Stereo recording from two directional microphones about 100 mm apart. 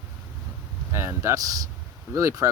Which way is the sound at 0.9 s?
30° right (ahead or behind).